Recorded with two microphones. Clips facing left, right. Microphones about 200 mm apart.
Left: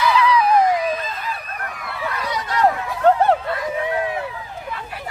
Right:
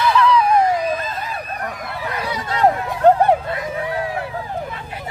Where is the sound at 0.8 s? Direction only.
45° right (ahead or behind).